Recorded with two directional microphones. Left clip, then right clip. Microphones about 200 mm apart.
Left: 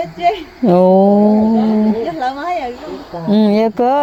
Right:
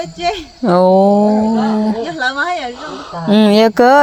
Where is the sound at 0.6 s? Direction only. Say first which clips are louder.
Even; 20° left (ahead or behind).